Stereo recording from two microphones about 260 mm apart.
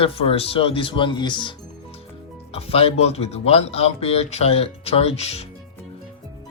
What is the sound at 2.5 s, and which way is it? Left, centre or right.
Speech, left.